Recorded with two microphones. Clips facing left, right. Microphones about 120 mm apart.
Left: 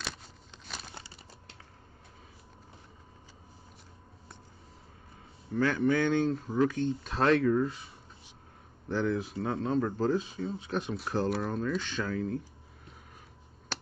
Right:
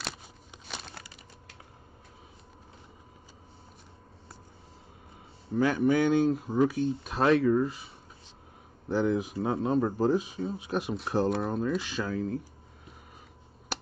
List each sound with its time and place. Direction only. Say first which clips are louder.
0.7 s crumpling: right 2 dB; 5° left (ahead or behind)
0.9 s crumpling: even; 25° left (ahead or behind)
5.5 s speech: right 2 dB; 15° right (ahead or behind)
8.8 s speech: right 3 dB; 15° right (ahead or behind)
11.2 s speech: right 3 dB; centre (ahead or behind)
11.5 s speech: right 2 dB; 10° right (ahead or behind)